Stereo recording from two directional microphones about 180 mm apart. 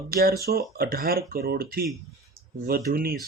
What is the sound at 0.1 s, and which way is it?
Speech, 55° right (ahead or behind).